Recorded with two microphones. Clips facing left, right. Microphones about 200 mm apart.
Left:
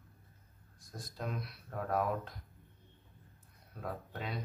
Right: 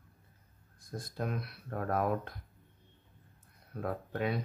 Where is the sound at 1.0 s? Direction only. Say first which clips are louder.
Right 4 dB; 55° right (ahead or behind).